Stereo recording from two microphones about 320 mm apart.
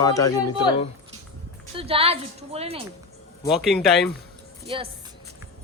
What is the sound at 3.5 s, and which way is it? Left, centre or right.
Speech, centre.